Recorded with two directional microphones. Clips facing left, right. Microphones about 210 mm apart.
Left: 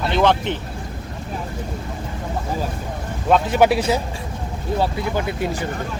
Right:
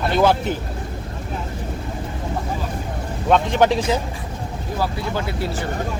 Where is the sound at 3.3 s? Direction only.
5° left (ahead or behind).